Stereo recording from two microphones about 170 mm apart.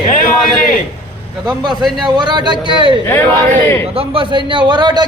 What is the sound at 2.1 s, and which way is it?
A man's voice, 25° right (ahead or behind).